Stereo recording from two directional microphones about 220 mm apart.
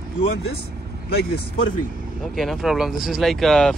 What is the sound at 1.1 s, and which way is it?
Speech, 45° left (ahead or behind).